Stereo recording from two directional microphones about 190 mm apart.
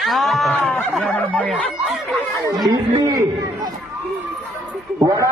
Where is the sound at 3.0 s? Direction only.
20° right (ahead or behind).